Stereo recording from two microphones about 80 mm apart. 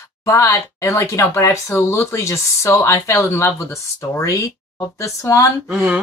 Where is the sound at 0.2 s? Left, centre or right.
Left.